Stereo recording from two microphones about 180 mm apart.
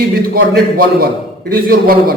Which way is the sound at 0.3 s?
55° right (ahead or behind).